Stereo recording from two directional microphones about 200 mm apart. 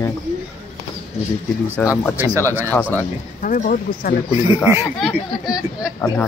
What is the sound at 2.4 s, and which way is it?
Speech, 10° right (ahead or behind).